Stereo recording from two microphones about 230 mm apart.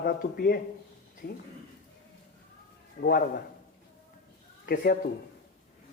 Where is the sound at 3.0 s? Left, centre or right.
Left.